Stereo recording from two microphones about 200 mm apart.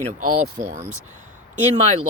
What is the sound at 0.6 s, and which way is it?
Speech, 35° right (ahead or behind).